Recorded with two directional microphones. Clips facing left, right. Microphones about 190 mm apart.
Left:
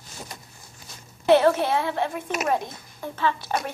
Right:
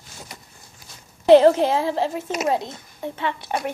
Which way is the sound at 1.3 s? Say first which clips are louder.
Right 5 dB; 30° right (ahead or behind).